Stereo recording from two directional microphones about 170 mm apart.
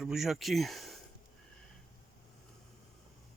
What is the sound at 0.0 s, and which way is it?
Speech, centre (ahead or behind).